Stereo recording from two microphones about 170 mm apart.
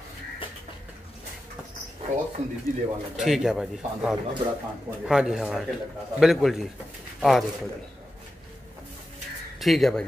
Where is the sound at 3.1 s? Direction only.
Centre (ahead or behind).